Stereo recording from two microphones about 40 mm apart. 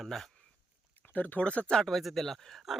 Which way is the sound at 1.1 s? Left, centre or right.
Left.